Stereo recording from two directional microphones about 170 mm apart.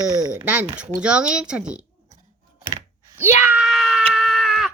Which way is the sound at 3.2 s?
15° right (ahead or behind).